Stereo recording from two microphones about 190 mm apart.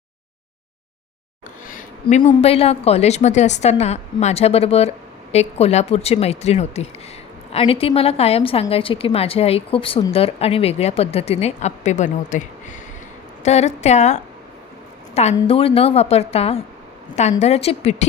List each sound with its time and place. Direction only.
1.6 s a woman's voice: 40° left (ahead or behind)